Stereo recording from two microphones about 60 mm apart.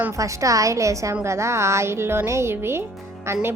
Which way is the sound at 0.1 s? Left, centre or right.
Right.